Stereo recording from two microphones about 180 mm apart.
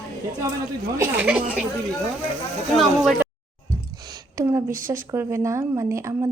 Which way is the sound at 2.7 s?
Centre (ahead or behind).